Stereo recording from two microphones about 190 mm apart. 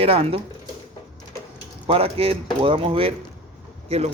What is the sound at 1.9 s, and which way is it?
Speech, 30° right (ahead or behind).